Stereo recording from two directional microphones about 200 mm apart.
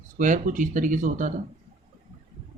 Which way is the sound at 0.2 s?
40° right (ahead or behind).